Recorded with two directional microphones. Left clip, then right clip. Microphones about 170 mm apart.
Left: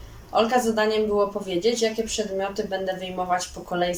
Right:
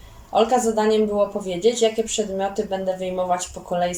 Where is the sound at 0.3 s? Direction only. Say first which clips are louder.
Right 2 dB; 20° right (ahead or behind).